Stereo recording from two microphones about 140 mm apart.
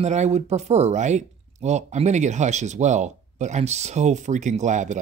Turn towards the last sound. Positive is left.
turn(degrees=-60)  # may be behind; listen again after turning